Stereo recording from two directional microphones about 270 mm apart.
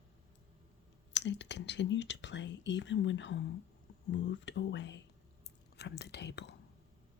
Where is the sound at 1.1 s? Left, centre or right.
Left.